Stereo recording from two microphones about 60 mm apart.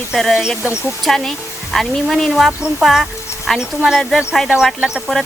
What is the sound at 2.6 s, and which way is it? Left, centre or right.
Speech, centre.